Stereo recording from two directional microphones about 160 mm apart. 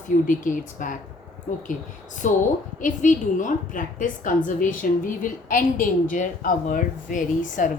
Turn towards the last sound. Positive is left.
turn(degrees=55)  # may be behind; listen again after turning